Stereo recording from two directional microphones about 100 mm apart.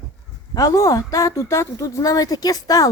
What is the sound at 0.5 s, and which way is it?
A woman's voice, 35° left (ahead or behind).